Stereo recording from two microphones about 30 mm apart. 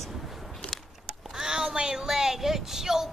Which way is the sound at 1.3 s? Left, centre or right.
Right.